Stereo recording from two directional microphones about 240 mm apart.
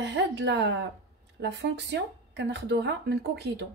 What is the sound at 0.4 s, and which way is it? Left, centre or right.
Speech, right.